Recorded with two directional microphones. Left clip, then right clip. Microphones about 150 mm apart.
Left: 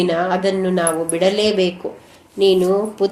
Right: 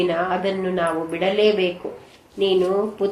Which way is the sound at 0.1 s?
60° left (ahead or behind).